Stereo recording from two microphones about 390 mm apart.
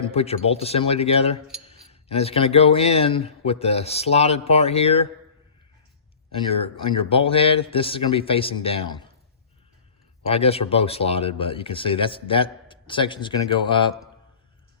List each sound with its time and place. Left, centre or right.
0.1 s speech: centre
6.3 s speech: centre
10.2 s speech: centre